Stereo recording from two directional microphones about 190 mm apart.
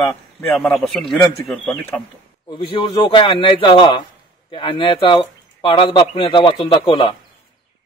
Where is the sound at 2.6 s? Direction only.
25° left (ahead or behind).